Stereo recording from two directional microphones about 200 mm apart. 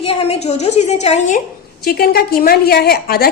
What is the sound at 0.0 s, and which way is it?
A woman's voice, 30° left (ahead or behind).